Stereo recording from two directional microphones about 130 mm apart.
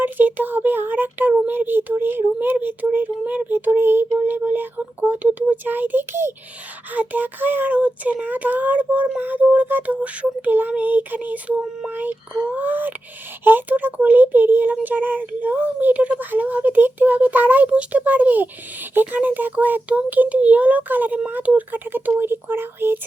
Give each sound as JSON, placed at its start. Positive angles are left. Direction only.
{"t": 0.0, "sound": "speech", "side_deg": -15}